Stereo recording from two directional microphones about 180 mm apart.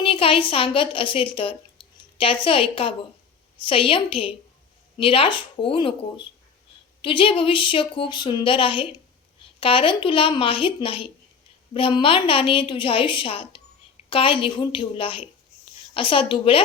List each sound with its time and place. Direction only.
0.0 s a woman's voice: 30° left (ahead or behind)